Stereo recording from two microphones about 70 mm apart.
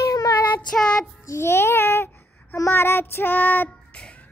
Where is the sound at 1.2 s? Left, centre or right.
Left.